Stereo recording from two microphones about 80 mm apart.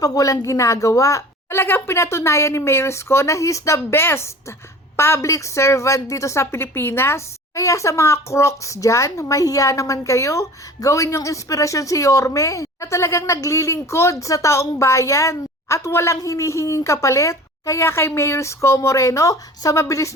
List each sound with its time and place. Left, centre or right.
0.0 s a woman's voice: left